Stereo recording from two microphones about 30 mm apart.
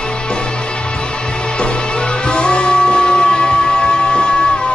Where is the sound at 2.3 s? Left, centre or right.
Left.